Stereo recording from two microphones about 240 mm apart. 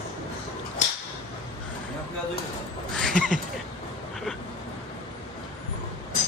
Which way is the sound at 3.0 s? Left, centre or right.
Centre.